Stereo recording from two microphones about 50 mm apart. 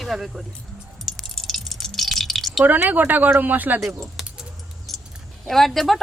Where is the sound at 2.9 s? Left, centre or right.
Right.